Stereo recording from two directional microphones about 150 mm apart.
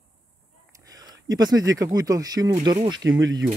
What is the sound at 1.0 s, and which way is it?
Speech, 25° right (ahead or behind).